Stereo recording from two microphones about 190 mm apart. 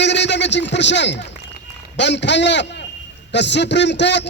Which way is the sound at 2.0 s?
65° left (ahead or behind).